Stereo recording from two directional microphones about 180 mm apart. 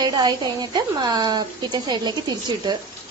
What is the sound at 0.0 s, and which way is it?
Speech, 25° right (ahead or behind).